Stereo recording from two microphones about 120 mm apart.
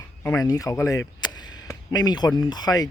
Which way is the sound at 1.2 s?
35° left (ahead or behind).